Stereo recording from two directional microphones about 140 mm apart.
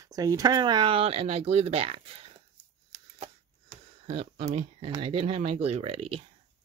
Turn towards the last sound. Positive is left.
turn(degrees=-45)  # may be behind; listen again after turning